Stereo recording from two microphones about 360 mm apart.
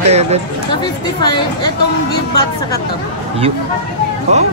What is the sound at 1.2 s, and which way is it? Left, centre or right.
Speech, centre.